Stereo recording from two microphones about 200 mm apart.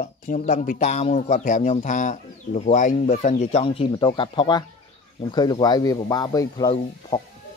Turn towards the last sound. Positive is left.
turn(degrees=20)  # may be behind; listen again after turning